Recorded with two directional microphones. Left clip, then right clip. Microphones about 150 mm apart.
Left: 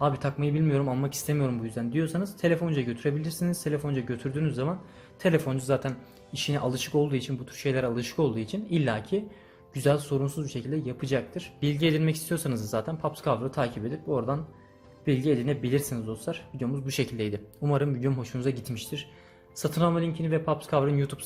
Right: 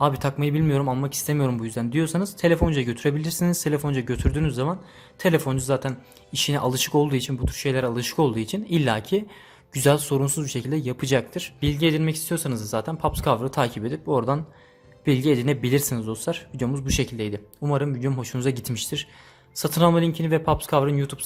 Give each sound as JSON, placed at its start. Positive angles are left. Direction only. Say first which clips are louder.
{"t": 0.0, "sound": "a man's voice", "louder": "right 5 dB", "side_deg": -35}
{"t": 1.4, "sound": "a man's voice", "louder": "right 6 dB", "side_deg": -40}
{"t": 11.6, "sound": "a man's voice", "louder": "right 3 dB", "side_deg": -25}
{"t": 16.9, "sound": "speech", "louder": "right 1 dB", "side_deg": -20}
{"t": 18.2, "sound": "a man's voice", "louder": "right 4 dB", "side_deg": -35}